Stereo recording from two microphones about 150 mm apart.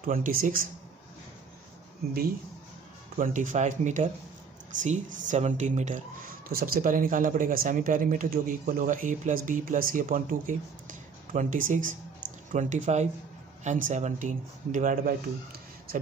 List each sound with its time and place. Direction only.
0.0 s a man's voice: 70° right (ahead or behind)
3.2 s speech: 55° right (ahead or behind)